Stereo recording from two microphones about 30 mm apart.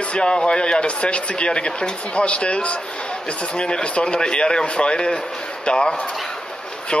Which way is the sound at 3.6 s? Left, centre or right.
Left.